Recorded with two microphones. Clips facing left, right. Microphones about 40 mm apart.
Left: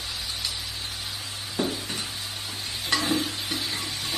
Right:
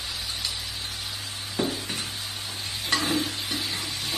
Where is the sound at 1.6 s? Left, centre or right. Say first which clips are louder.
Even; centre.